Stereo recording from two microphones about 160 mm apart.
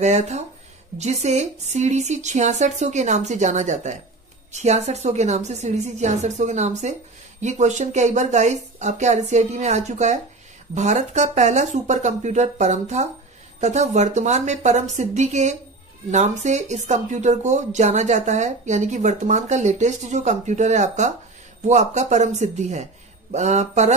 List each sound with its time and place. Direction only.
0.0 s speech: 45° right (ahead or behind)